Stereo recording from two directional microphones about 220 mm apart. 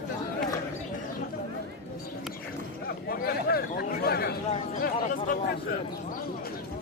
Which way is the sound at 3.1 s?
45° left (ahead or behind).